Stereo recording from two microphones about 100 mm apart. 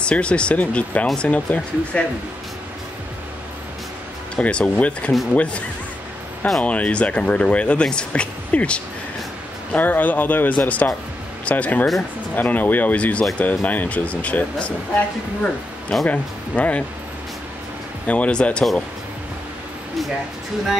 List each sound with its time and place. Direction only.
0.0 s speech: 10° left (ahead or behind)
4.4 s speech: 10° left (ahead or behind)
6.6 s speech: 15° left (ahead or behind)
16.1 s speech: 15° left (ahead or behind)
18.0 s speech: 15° left (ahead or behind)